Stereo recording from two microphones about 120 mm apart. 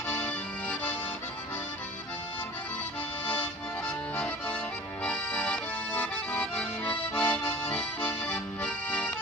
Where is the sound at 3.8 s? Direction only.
15° left (ahead or behind).